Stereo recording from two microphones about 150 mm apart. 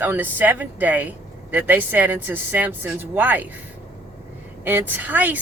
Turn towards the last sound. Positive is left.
turn(degrees=-10)  # may be behind; listen again after turning